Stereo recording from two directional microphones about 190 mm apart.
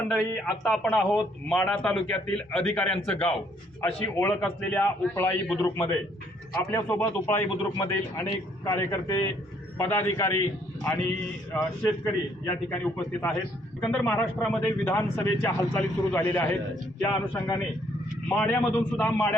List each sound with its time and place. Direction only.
0.6 s speech: 5° left (ahead or behind)
11.5 s speech: 10° left (ahead or behind)